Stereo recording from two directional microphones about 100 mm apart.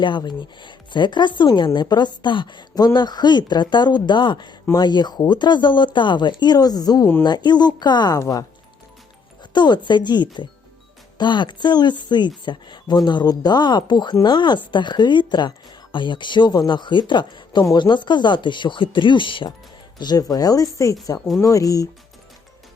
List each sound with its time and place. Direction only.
0.0 s speech: 50° left (ahead or behind)
9.4 s speech: 45° left (ahead or behind)
20.0 s speech: 40° left (ahead or behind)
21.2 s speech: centre (ahead or behind)
21.4 s speech: 35° left (ahead or behind)